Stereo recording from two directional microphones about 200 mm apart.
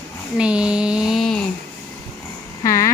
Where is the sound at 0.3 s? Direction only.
5° right (ahead or behind).